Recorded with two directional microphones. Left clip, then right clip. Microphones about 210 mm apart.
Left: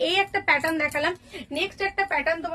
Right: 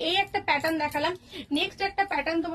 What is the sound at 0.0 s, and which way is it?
Speech, 25° left (ahead or behind).